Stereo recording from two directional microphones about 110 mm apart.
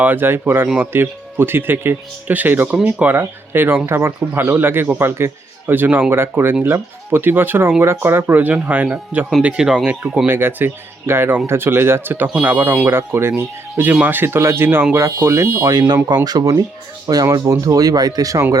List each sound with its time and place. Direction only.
0.0 s speech: 15° right (ahead or behind)
15.7 s speech: 35° right (ahead or behind)